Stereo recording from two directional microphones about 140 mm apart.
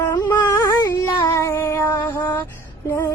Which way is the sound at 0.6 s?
20° left (ahead or behind).